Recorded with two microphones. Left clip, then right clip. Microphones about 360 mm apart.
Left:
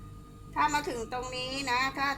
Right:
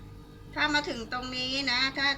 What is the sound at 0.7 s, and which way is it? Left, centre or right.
A woman's voice, centre.